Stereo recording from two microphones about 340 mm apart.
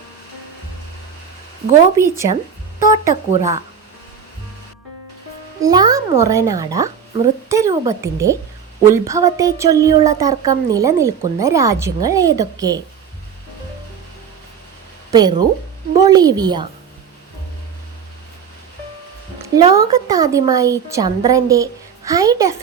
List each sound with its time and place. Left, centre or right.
2.0 s speech: centre
5.5 s speech: centre
15.1 s speech: centre
19.5 s speech: centre